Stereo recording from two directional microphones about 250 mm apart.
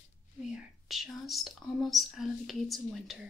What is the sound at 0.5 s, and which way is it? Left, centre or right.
Speech, centre.